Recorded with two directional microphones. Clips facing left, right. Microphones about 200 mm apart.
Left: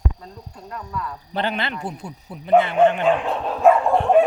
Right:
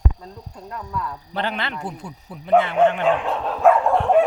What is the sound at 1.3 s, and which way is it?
A man's voice, 15° left (ahead or behind).